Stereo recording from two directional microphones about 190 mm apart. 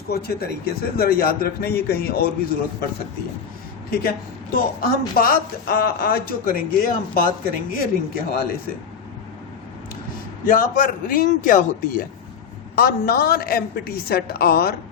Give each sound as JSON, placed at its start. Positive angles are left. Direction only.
{"t": 0.1, "sound": "speech", "side_deg": 55}
{"t": 3.8, "sound": "speech", "side_deg": 50}
{"t": 10.4, "sound": "speech", "side_deg": 45}